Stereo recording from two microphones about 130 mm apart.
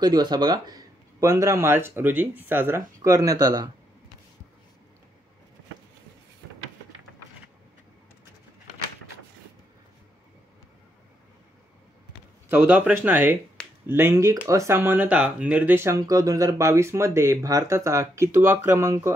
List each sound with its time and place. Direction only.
0.0 s speech: 30° right (ahead or behind)
12.4 s speech: 15° right (ahead or behind)